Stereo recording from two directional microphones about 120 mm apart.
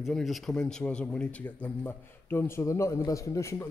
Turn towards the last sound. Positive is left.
turn(degrees=25)  # may be behind; listen again after turning